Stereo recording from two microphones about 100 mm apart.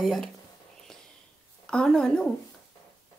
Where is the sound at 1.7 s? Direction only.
10° left (ahead or behind).